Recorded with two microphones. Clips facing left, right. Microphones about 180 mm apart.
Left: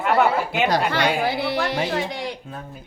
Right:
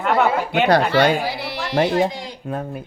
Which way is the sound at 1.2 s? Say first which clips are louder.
Left 4 dB; 55° left (ahead or behind).